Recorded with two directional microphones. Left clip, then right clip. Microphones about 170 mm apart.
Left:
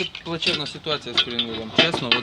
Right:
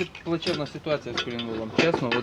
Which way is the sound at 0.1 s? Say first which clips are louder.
Left 4 dB; 30° right (ahead or behind).